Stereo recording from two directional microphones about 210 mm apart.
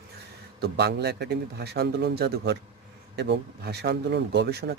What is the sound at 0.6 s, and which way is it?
A man's voice, 50° right (ahead or behind).